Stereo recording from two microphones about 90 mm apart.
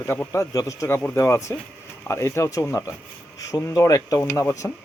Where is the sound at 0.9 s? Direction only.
25° left (ahead or behind).